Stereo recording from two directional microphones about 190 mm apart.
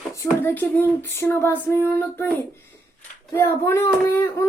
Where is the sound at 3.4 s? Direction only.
15° left (ahead or behind).